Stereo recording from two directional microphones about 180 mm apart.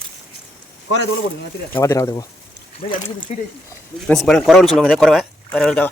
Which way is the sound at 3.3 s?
40° left (ahead or behind).